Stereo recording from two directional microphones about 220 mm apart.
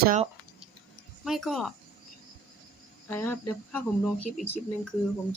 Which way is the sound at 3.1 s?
10° left (ahead or behind).